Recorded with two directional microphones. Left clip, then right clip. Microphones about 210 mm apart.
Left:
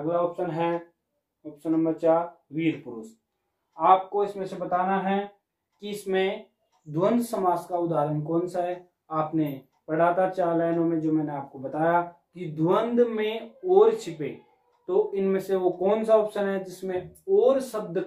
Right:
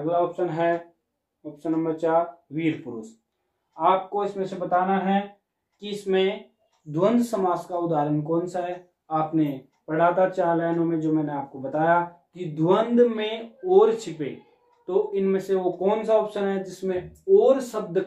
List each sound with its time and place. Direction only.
0.5 s speech: 25° right (ahead or behind)
3.7 s speech: 15° right (ahead or behind)
5.8 s speech: 10° right (ahead or behind)